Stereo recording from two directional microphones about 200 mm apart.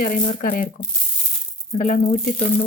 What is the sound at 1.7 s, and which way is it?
Speech, 40° left (ahead or behind).